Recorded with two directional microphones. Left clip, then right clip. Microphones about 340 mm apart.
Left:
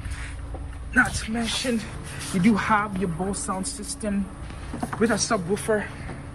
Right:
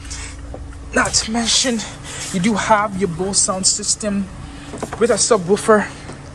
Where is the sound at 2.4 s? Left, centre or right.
Centre.